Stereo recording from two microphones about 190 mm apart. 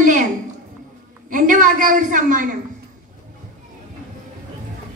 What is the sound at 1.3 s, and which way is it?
A woman's voice, 45° right (ahead or behind).